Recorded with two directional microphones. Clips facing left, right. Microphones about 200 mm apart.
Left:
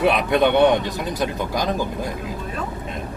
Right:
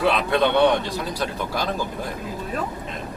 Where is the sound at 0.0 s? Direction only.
20° left (ahead or behind).